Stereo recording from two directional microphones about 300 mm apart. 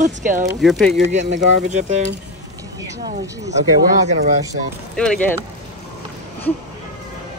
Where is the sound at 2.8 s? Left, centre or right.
Centre.